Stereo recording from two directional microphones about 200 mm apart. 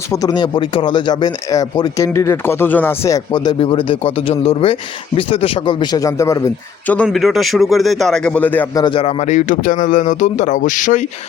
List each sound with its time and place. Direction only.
0.1 s speech: 20° left (ahead or behind)
8.8 s speech: 25° left (ahead or behind)